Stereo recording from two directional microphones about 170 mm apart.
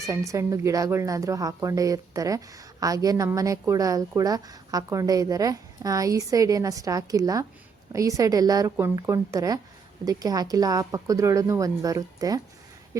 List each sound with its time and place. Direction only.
0.0 s a woman's voice: 20° right (ahead or behind)